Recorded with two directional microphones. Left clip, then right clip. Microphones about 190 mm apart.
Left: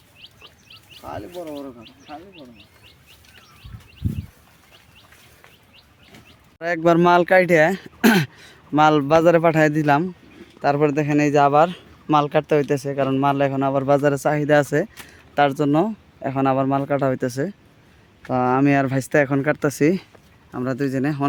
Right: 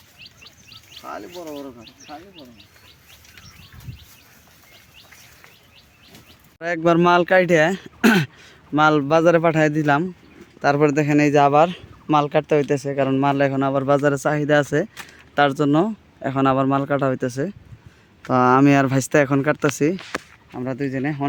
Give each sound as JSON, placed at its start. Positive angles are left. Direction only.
{"t": 1.3, "sound": "speech", "side_deg": 25}
{"t": 6.6, "sound": "speech", "side_deg": 0}
{"t": 10.6, "sound": "speech", "side_deg": -10}
{"t": 18.3, "sound": "speech", "side_deg": -25}
{"t": 20.5, "sound": "speech", "side_deg": 20}